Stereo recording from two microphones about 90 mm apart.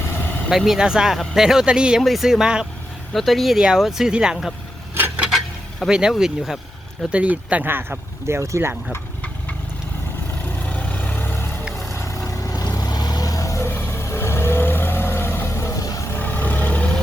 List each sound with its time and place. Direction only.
0.0 s vehicle: 25° left (ahead or behind)
0.5 s speech: 5° right (ahead or behind)
4.9 s a sound: 15° right (ahead or behind)
5.9 s speech: 10° right (ahead or behind)
7.1 s speech: 15° right (ahead or behind)
10.6 s vehicle: 15° left (ahead or behind)
11.6 s vehicle: centre (ahead or behind)
11.9 s vehicle: 35° left (ahead or behind)
16.1 s vehicle: 20° left (ahead or behind)